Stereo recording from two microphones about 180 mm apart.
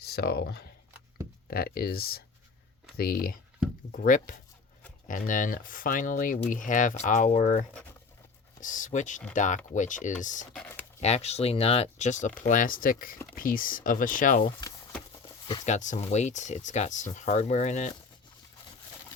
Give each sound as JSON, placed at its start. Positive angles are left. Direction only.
{"t": 0.0, "sound": "speech", "side_deg": 65}
{"t": 8.6, "sound": "speech", "side_deg": 45}
{"t": 10.5, "sound": "computer keyboard", "side_deg": 5}
{"t": 11.0, "sound": "speech", "side_deg": 35}
{"t": 15.6, "sound": "speech", "side_deg": 40}